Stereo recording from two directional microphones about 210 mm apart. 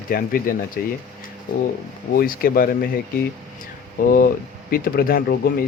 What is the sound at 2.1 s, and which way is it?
Speech, 45° left (ahead or behind).